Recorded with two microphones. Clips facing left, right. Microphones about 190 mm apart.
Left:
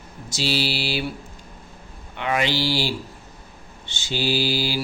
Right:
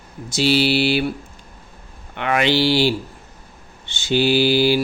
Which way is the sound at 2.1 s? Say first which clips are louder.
Right 5 dB; 65° right (ahead or behind).